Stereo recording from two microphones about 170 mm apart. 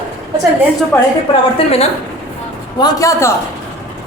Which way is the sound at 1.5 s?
35° left (ahead or behind).